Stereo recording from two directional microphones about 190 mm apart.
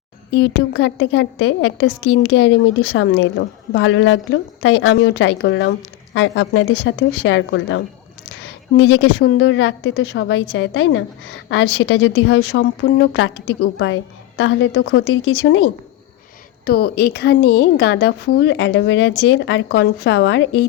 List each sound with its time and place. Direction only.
0.3 s a woman's voice: 70° left (ahead or behind)
6.1 s a woman's voice: 90° left
9.0 s a woman's voice: 60° left (ahead or behind); by 11.0 s 80° left
11.4 s a woman's voice: 60° left (ahead or behind); by 15.6 s 90° left
16.6 s a woman's voice: 55° left (ahead or behind)